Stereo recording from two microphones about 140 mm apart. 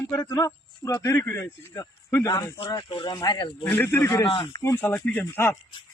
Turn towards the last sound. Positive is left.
turn(degrees=10)  # may be behind; listen again after turning